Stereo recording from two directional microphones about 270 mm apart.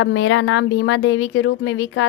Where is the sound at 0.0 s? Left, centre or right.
Left.